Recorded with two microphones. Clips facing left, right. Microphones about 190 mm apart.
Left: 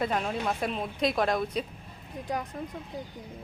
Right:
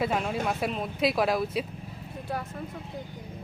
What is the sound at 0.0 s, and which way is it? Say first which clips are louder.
Speech: right 1 dB; 5° right (ahead or behind).